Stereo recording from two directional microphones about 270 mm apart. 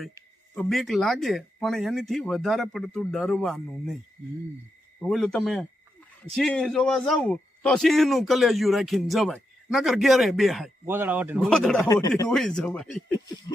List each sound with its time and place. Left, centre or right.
0.5 s a man's voice: centre
5.0 s a man's voice: centre
11.9 s chopping: centre
12.3 s a man's voice: centre